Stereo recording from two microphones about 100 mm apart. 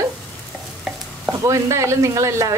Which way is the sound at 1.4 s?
30° right (ahead or behind).